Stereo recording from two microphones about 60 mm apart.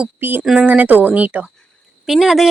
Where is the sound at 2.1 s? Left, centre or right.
Centre.